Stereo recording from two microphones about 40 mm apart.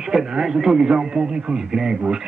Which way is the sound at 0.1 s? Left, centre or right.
Centre.